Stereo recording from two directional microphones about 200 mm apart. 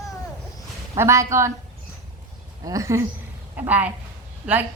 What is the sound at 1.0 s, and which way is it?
Speech, 15° right (ahead or behind).